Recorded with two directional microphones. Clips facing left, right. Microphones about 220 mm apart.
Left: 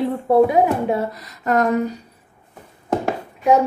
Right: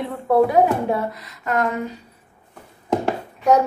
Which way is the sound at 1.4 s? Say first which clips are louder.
Left 4 dB; 40° left (ahead or behind).